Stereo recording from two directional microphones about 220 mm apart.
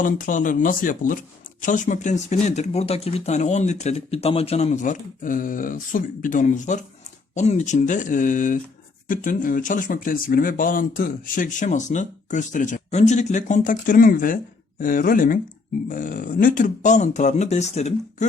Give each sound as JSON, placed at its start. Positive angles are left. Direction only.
{"t": 0.0, "sound": "speech", "side_deg": 35}